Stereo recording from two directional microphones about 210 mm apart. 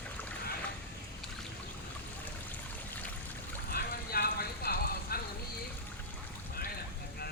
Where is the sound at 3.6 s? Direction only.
45° left (ahead or behind).